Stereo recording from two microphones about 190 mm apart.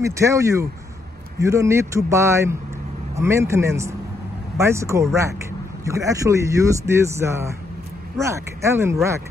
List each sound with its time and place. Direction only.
0.0 s speech: 15° right (ahead or behind)